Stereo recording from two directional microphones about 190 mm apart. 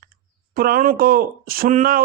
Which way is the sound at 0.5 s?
50° right (ahead or behind).